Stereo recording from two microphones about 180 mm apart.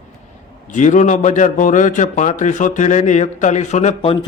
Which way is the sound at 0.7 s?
45° left (ahead or behind).